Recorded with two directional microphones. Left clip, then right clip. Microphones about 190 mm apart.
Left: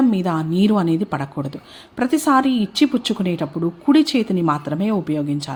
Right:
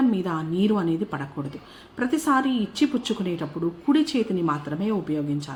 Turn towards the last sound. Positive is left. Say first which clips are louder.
# left 5 dB
turn(degrees=45)  # may be behind; listen again after turning